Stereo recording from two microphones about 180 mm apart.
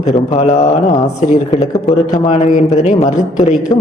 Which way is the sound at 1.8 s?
40° left (ahead or behind).